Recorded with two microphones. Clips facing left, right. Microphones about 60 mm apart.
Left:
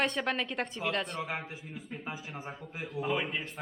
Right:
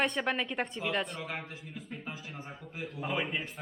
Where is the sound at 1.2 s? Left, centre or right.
Centre.